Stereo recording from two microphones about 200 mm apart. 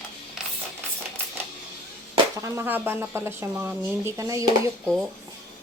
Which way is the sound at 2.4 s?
10° right (ahead or behind).